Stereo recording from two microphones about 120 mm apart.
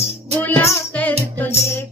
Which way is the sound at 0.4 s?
15° left (ahead or behind).